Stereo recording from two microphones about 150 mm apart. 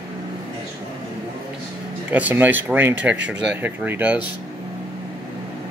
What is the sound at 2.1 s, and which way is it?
Speech, 10° right (ahead or behind).